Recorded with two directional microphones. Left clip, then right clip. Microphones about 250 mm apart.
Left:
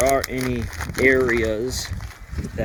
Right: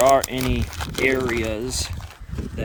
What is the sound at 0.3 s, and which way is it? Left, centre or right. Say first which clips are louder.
Speech: even; right.